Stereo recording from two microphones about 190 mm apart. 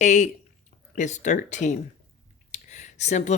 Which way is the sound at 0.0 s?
40° left (ahead or behind).